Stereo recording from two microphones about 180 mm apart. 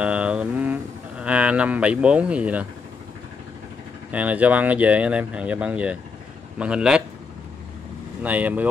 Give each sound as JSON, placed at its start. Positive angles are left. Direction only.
{"t": 0.0, "sound": "speech", "side_deg": -5}
{"t": 4.1, "sound": "speech", "side_deg": -10}
{"t": 8.2, "sound": "speech", "side_deg": -10}